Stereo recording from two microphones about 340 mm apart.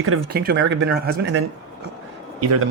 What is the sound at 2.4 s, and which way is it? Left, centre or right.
Speech, right.